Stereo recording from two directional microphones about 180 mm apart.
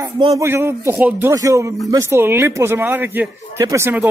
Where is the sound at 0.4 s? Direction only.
15° right (ahead or behind).